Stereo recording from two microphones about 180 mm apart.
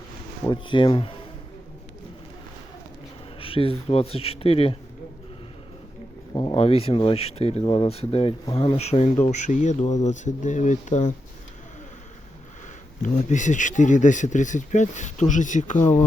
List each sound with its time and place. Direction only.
0.5 s speech: 25° left (ahead or behind)
3.4 s speech: 30° left (ahead or behind)
6.3 s speech: 25° left (ahead or behind); by 11.1 s 40° left (ahead or behind)
13.0 s speech: 45° left (ahead or behind)